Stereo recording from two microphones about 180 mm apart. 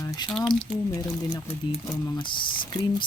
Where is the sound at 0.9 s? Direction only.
20° left (ahead or behind).